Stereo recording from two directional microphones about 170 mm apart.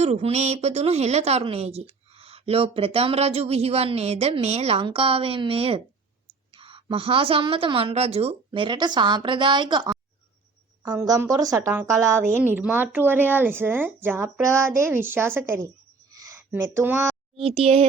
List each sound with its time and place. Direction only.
0.0 s a woman's voice: 40° right (ahead or behind); by 15.7 s 15° right (ahead or behind)
16.1 s a sound: 20° right (ahead or behind)
17.3 s a woman's voice: 35° right (ahead or behind)